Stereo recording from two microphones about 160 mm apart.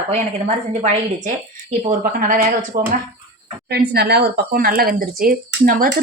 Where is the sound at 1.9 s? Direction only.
60° right (ahead or behind).